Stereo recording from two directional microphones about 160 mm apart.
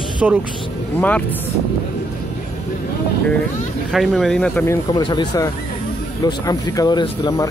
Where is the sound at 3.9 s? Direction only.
Centre (ahead or behind).